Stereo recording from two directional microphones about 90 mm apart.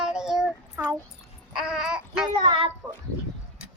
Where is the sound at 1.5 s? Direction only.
5° right (ahead or behind).